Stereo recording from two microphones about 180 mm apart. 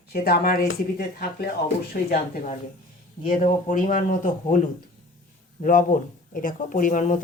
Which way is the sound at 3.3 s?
45° left (ahead or behind).